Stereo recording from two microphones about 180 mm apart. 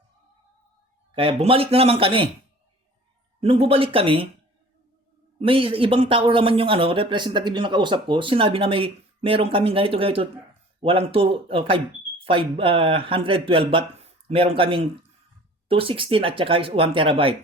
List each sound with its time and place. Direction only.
1.1 s speech: 30° right (ahead or behind)
3.4 s speech: 30° right (ahead or behind)
5.4 s speech: 30° right (ahead or behind)